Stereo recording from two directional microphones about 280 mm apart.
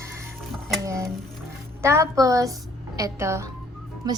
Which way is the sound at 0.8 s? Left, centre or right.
Centre.